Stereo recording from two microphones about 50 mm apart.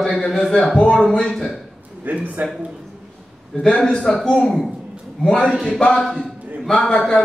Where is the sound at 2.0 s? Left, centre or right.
Right.